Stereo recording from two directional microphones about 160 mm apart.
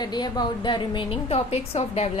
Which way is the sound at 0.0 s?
25° left (ahead or behind).